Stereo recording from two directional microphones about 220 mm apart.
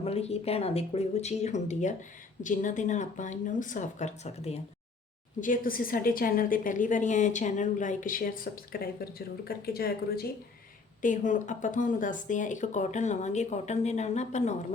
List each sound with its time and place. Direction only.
0.0 s a woman's voice: 25° left (ahead or behind)